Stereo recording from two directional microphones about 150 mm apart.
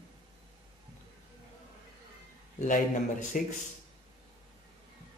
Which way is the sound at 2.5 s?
60° left (ahead or behind).